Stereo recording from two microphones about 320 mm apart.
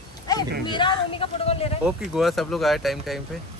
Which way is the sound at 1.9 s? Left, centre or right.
Centre.